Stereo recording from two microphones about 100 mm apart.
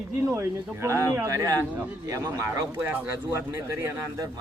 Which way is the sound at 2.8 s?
20° right (ahead or behind).